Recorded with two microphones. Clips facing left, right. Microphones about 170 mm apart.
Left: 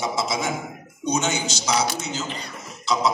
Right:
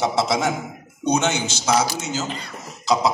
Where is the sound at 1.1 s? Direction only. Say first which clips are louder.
Right 3 dB; 55° right (ahead or behind).